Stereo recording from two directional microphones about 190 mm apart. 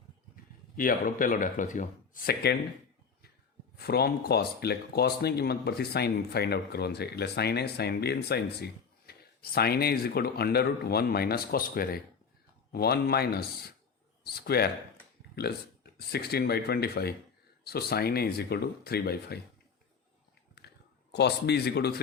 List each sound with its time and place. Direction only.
0.8 s speech: 50° left (ahead or behind)
3.8 s speech: 55° left (ahead or behind)
21.1 s speech: 60° left (ahead or behind)